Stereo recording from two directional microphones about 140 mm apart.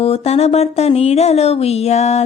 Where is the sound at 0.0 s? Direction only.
45° left (ahead or behind).